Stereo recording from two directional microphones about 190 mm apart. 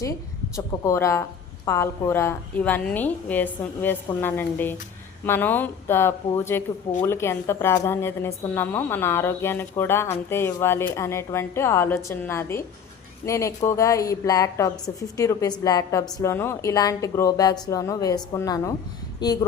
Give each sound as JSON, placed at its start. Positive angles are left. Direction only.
{"t": 0.5, "sound": "a woman's voice", "side_deg": 15}